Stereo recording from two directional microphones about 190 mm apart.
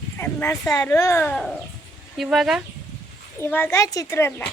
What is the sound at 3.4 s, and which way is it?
Speech, 10° left (ahead or behind).